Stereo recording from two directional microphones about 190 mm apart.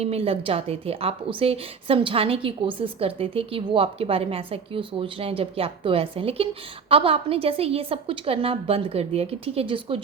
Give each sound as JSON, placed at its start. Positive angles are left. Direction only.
{"t": 0.0, "sound": "a woman's voice", "side_deg": -30}